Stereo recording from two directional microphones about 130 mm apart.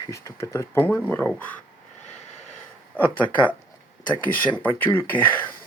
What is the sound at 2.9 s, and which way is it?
Speech, 10° left (ahead or behind).